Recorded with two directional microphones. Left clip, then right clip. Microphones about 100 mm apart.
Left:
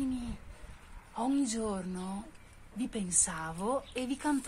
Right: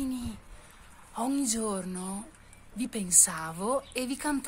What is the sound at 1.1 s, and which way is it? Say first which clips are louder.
A woman's voice: right 2 dB; 30° right (ahead or behind).